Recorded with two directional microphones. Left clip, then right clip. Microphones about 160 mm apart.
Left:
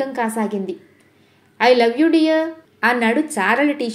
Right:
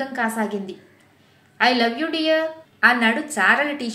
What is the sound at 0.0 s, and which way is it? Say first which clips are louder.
A woman's voice: left 2 dB; 30° left (ahead or behind).